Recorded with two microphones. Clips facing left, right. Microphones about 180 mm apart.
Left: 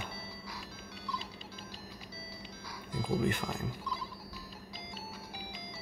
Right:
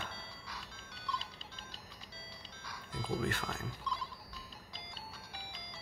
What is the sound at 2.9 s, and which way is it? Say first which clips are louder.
Music: left 5 dB; 10° left (ahead or behind).